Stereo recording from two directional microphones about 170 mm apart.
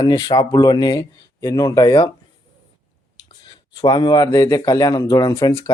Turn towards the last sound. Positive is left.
turn(degrees=20)  # may be behind; listen again after turning